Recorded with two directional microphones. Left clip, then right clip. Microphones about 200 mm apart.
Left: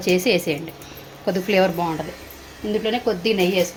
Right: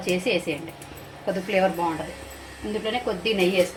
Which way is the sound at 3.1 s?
55° left (ahead or behind).